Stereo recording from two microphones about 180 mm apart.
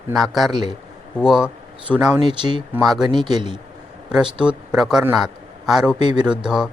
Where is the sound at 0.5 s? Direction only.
25° right (ahead or behind).